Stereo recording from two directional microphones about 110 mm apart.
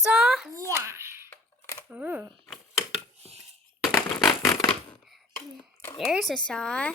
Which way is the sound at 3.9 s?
25° left (ahead or behind).